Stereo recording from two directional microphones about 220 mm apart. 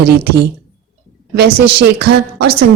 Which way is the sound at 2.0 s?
50° right (ahead or behind).